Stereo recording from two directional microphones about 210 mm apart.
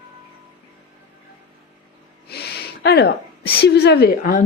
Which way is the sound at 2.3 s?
50° left (ahead or behind).